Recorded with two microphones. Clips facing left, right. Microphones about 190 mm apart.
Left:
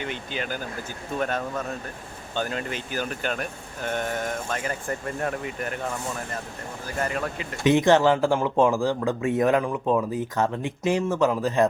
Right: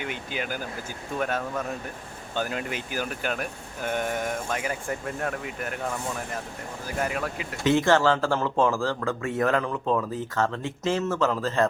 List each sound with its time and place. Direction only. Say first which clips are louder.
0.0 s speech: left 1 dB; 10° right (ahead or behind)
7.6 s speech: left 3 dB; 15° left (ahead or behind)